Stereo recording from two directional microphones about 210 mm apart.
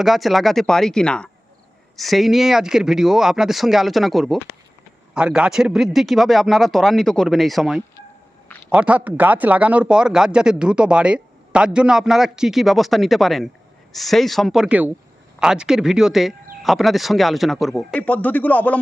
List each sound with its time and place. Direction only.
0.0 s speech: centre (ahead or behind)